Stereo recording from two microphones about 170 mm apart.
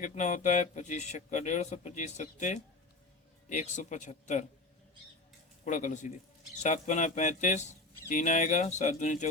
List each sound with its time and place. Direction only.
0.0 s speech: 45° left (ahead or behind)
5.6 s speech: 45° left (ahead or behind)